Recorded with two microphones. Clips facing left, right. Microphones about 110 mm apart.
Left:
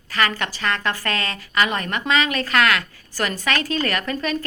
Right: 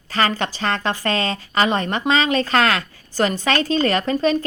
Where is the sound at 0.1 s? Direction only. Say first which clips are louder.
Right 2 dB; 30° right (ahead or behind).